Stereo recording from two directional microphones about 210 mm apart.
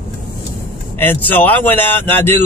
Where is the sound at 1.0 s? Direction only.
10° left (ahead or behind).